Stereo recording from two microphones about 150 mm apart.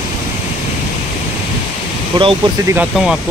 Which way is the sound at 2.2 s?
25° right (ahead or behind).